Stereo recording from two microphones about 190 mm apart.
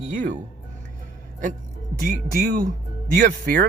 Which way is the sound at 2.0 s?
50° right (ahead or behind).